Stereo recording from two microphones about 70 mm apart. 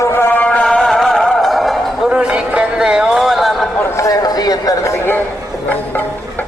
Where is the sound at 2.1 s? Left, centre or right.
Centre.